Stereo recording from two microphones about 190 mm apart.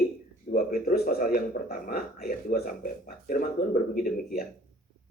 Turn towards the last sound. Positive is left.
turn(degrees=45)  # may be behind; listen again after turning